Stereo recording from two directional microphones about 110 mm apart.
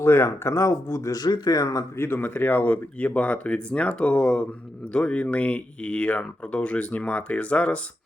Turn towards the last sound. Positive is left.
turn(degrees=10)  # may be behind; listen again after turning